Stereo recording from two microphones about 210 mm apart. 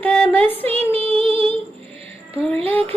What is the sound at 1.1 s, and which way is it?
Female singing, 5° left (ahead or behind).